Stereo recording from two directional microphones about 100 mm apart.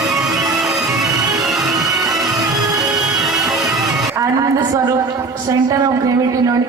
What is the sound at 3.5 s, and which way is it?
Music, centre (ahead or behind).